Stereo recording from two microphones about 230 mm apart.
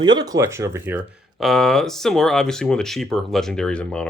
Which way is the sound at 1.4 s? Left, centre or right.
Centre.